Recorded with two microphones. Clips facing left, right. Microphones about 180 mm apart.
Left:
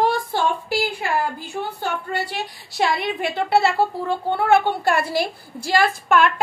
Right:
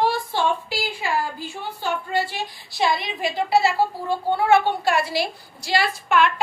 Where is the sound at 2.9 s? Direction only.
65° left (ahead or behind).